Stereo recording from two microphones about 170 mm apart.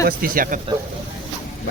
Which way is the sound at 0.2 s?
55° right (ahead or behind).